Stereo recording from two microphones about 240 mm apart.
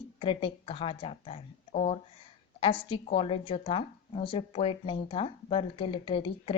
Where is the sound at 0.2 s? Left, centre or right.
Left.